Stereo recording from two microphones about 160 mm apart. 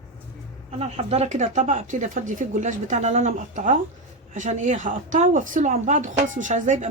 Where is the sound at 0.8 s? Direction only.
40° right (ahead or behind).